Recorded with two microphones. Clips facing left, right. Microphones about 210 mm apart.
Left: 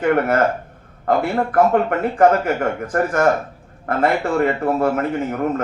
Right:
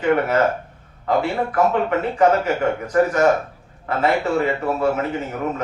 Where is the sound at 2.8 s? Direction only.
50° left (ahead or behind).